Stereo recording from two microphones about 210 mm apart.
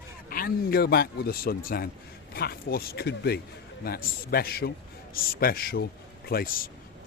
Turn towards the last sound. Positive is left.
turn(degrees=45)  # may be behind; listen again after turning